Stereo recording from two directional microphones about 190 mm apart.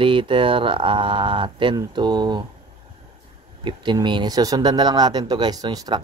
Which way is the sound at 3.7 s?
25° right (ahead or behind).